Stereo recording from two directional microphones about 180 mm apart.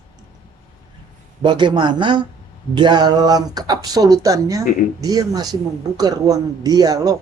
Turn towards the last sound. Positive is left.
turn(degrees=-20)  # may be behind; listen again after turning